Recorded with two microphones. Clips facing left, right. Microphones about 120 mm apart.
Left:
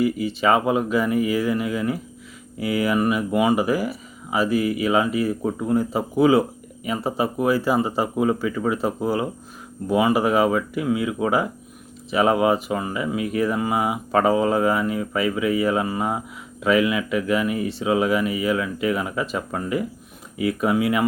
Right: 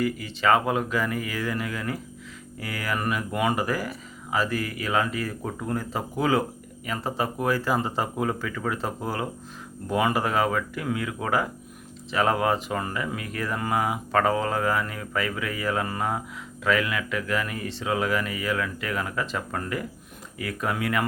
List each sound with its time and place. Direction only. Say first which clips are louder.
0.0 s speech: left 4 dB; 15° left (ahead or behind)